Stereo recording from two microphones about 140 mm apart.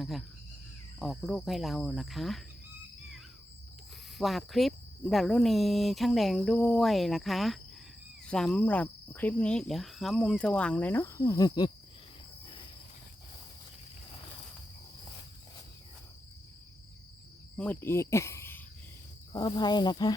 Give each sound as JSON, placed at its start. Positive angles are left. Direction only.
{"t": 0.0, "sound": "speech", "side_deg": 0}
{"t": 4.2, "sound": "speech", "side_deg": 0}
{"t": 17.6, "sound": "speech", "side_deg": 15}
{"t": 19.3, "sound": "speech", "side_deg": 30}